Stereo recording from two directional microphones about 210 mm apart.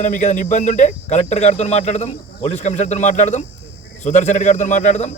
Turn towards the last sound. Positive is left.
turn(degrees=35)  # may be behind; listen again after turning